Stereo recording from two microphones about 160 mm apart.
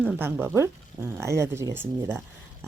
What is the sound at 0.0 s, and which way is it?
Speech, 10° right (ahead or behind).